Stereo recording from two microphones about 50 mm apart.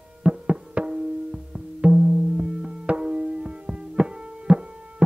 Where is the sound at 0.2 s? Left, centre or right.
Centre.